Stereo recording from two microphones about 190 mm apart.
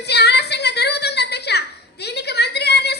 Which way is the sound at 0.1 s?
60° left (ahead or behind).